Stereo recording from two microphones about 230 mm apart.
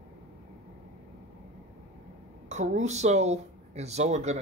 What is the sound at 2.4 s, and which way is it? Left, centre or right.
Speech, right.